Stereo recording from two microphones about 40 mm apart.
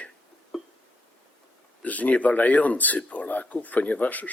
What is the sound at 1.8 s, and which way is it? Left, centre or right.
Speech, left.